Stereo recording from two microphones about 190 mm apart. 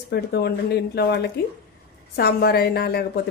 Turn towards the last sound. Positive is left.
turn(degrees=55)  # may be behind; listen again after turning